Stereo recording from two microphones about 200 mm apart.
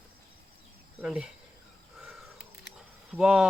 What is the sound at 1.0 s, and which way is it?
Speech, 5° right (ahead or behind).